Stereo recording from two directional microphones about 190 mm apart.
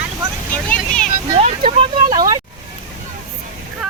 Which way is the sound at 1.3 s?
30° right (ahead or behind).